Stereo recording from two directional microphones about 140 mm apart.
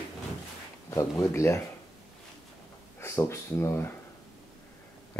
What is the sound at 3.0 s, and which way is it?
Speech, 20° left (ahead or behind).